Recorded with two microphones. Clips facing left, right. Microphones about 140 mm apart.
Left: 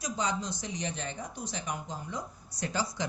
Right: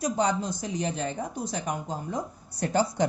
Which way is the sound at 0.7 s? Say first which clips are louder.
Right 9 dB; 35° right (ahead or behind).